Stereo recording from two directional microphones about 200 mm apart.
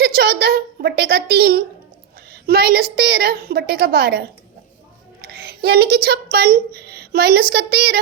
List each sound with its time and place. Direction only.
0.0 s a woman's voice: 50° right (ahead or behind)